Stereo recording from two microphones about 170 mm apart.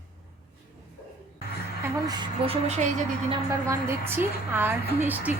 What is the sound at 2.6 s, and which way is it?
Speech, 40° right (ahead or behind).